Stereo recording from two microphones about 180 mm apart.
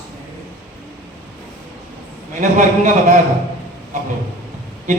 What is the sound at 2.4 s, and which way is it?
Speech, 45° right (ahead or behind).